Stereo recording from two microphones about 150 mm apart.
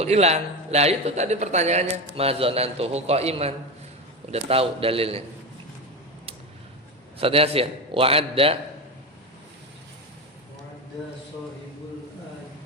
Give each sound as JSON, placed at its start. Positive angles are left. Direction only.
{"t": 0.0, "sound": "a man's voice", "side_deg": -45}
{"t": 7.2, "sound": "a man's voice", "side_deg": -40}